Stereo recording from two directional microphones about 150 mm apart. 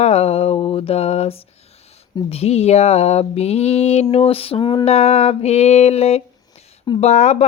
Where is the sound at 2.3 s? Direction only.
45° left (ahead or behind).